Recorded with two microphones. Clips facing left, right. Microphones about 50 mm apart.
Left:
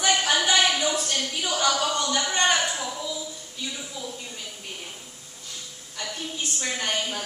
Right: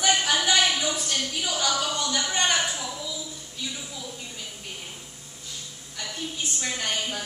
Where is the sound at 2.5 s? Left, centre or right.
Centre.